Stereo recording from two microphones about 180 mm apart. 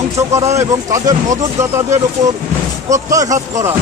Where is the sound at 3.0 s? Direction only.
20° right (ahead or behind).